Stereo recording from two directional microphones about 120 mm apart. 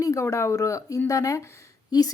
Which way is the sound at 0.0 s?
25° left (ahead or behind).